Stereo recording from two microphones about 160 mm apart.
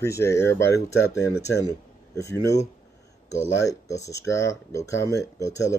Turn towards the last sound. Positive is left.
turn(degrees=20)  # may be behind; listen again after turning